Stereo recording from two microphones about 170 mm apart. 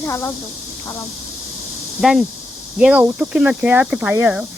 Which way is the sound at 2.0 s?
Centre (ahead or behind).